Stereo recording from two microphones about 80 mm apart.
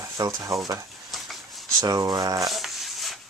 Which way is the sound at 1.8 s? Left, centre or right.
Right.